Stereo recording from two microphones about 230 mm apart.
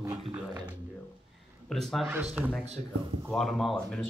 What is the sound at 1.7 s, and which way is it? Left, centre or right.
Speech, centre.